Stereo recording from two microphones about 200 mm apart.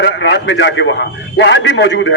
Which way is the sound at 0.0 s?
60° left (ahead or behind).